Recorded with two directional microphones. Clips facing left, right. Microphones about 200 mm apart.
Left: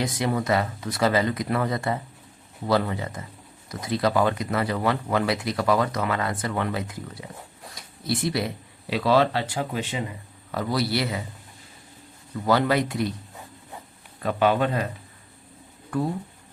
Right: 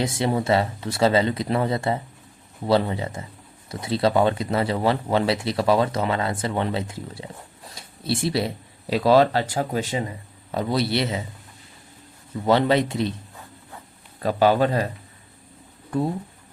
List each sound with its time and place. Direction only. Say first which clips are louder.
0.0 s speech: right 2 dB; 25° right (ahead or behind)
8.9 s speech: right 4 dB; 40° right (ahead or behind)
10.5 s speech: right 2 dB; 25° right (ahead or behind)
12.5 s speech: right 3 dB; 25° right (ahead or behind)
14.2 s speech: right 3 dB; 35° right (ahead or behind)